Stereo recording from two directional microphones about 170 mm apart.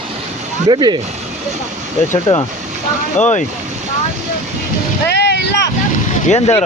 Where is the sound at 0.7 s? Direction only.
25° right (ahead or behind).